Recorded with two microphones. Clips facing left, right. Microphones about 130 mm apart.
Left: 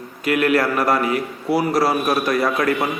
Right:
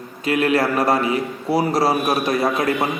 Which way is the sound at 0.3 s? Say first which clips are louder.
Even; 30° right (ahead or behind).